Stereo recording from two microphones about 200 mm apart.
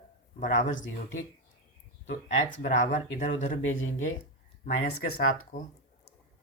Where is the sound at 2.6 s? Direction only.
40° left (ahead or behind).